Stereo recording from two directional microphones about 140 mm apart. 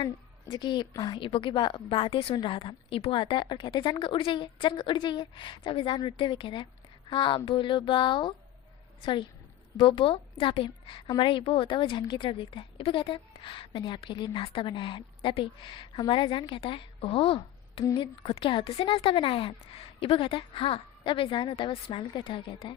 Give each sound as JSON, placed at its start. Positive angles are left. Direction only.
{"t": 0.5, "sound": "a woman's voice", "side_deg": 35}